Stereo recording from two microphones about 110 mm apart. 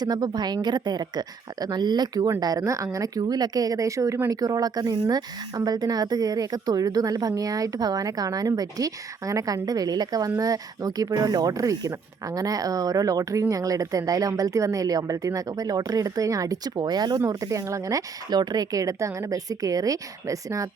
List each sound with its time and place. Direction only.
0.0 s speech: 35° right (ahead or behind)